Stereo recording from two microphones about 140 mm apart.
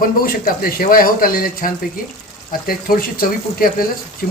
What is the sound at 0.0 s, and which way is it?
Speech, 90° left.